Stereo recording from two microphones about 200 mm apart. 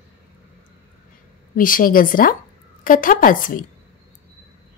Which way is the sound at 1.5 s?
45° left (ahead or behind).